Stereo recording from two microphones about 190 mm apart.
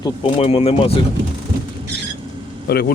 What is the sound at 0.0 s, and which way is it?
Speech, 30° left (ahead or behind).